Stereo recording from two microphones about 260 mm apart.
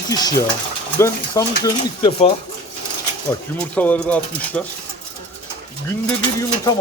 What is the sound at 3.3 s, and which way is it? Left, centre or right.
Speech, centre.